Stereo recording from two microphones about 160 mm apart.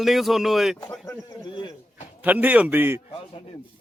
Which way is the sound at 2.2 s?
10° right (ahead or behind).